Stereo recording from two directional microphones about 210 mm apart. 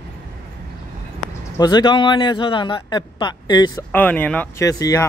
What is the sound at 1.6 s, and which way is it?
A man's voice, 20° left (ahead or behind).